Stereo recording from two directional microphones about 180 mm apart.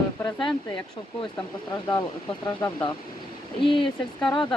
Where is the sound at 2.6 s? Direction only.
15° left (ahead or behind).